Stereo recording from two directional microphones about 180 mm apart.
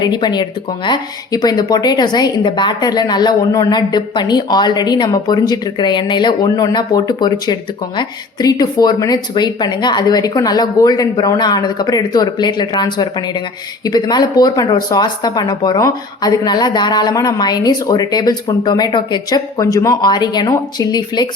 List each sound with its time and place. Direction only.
0.0 s a woman's voice: 25° left (ahead or behind)